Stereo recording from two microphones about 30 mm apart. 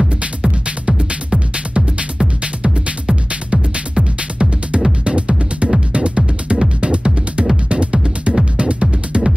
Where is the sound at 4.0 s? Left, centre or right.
Right.